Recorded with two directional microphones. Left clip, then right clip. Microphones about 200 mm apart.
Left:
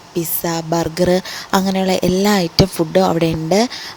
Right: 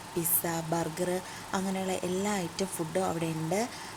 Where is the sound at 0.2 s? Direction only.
30° left (ahead or behind).